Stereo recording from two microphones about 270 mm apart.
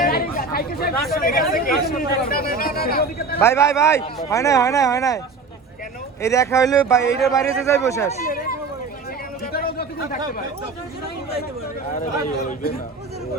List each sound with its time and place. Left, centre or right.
0.0 s chatter: left
1.1 s speech: left
3.4 s a man's voice: centre
6.2 s a man's voice: centre
8.3 s speech: left
9.4 s a sound: left
11.9 s speech: left